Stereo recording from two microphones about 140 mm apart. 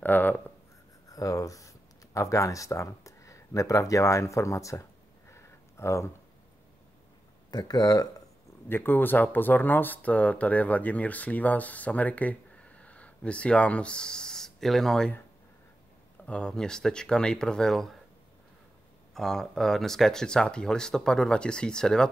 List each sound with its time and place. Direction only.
0.0 s writing: 10° left (ahead or behind)
1.0 s a sound: 25° left (ahead or behind)
7.5 s speech: 30° left (ahead or behind)
8.6 s speech: 15° left (ahead or behind)
16.3 s speech: 5° left (ahead or behind)
19.1 s speech: centre (ahead or behind)